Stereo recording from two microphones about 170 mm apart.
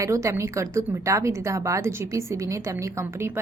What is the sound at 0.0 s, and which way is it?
A woman's voice, 15° right (ahead or behind).